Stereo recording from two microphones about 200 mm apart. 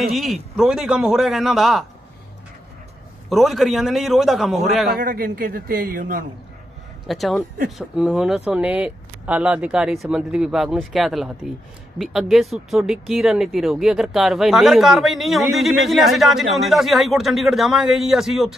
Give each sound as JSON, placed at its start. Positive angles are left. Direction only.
{"t": 0.0, "sound": "speech", "side_deg": 0}
{"t": 3.3, "sound": "speech", "side_deg": 0}
{"t": 4.9, "sound": "a man's voice", "side_deg": -45}
{"t": 7.1, "sound": "speech", "side_deg": 0}